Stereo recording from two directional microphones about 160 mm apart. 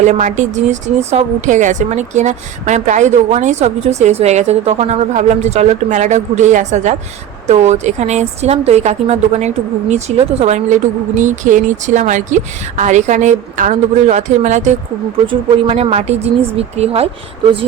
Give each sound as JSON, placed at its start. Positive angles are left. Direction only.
{"t": 0.0, "sound": "speech", "side_deg": -45}
{"t": 15.3, "sound": "a woman's voice", "side_deg": -35}